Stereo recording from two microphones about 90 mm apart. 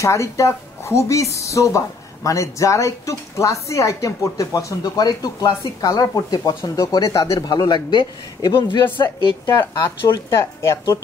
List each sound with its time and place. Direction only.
0.0 s speech: 35° left (ahead or behind)
7.4 s a man's voice: 50° left (ahead or behind)
9.5 s speech: 35° left (ahead or behind)